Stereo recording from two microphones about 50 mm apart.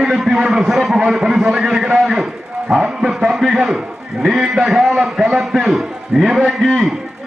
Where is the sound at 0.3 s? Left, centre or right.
Centre.